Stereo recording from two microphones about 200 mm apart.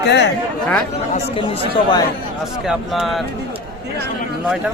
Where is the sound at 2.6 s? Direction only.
Centre (ahead or behind).